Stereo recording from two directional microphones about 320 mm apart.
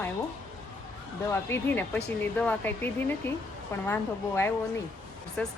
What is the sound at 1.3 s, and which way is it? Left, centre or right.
A woman's voice, centre.